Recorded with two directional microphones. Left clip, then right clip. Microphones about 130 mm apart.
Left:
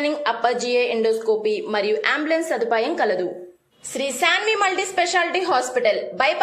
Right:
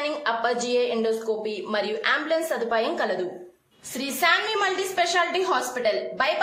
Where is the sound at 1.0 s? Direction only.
35° left (ahead or behind).